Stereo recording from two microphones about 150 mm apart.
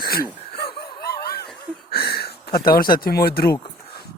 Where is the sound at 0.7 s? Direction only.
90° left.